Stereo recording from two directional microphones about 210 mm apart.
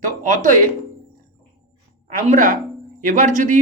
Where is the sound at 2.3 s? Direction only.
40° right (ahead or behind).